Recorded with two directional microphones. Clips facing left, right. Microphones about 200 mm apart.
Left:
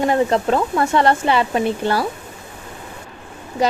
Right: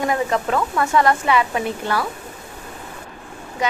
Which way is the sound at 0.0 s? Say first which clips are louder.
Left 4 dB; 30° left (ahead or behind).